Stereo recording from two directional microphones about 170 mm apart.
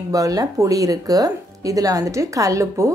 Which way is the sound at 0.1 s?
20° right (ahead or behind).